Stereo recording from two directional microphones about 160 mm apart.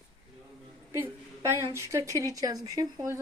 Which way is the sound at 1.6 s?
20° right (ahead or behind).